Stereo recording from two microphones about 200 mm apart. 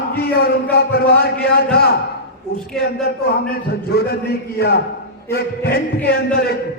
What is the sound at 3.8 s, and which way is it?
A man's voice, 50° left (ahead or behind).